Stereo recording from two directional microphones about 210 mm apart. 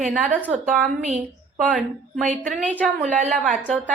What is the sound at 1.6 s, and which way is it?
A woman's voice, centre (ahead or behind).